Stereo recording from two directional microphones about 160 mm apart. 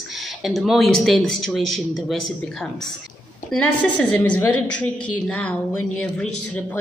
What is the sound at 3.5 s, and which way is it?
A woman's voice, 5° left (ahead or behind).